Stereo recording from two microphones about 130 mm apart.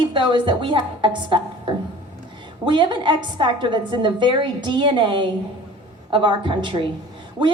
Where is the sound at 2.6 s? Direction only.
35° right (ahead or behind).